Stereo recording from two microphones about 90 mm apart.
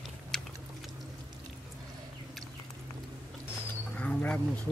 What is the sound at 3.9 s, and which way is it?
Bird, 15° left (ahead or behind).